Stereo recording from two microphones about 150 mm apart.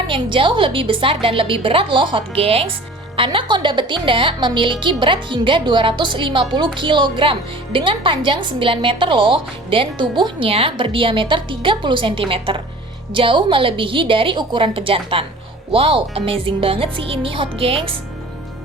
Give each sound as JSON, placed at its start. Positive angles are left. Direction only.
{"t": 0.1, "sound": "speech", "side_deg": -35}